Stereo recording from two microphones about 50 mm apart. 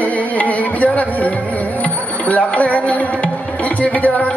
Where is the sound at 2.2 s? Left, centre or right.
Left.